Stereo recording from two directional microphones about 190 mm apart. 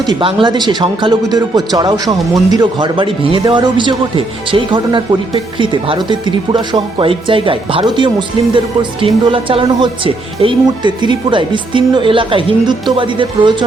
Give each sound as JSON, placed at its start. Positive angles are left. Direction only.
{"t": 0.1, "sound": "speech", "side_deg": -25}